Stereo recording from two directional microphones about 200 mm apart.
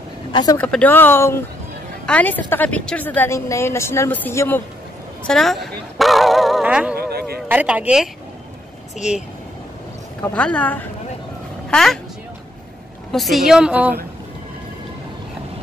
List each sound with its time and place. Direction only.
0.3 s speech: 20° left (ahead or behind)
0.6 s a woman's voice: 5° left (ahead or behind)
7.0 s a sound: 50° right (ahead or behind)
7.4 s a woman's voice: 10° right (ahead or behind)
10.2 s a woman's voice: 5° left (ahead or behind)
13.1 s a woman's voice: centre (ahead or behind)